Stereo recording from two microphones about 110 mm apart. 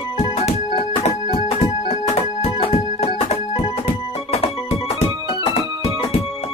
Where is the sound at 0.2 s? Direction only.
70° left (ahead or behind).